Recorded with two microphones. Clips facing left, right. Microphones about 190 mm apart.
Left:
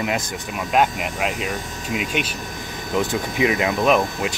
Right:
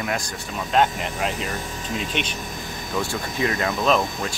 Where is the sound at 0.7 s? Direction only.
5° left (ahead or behind).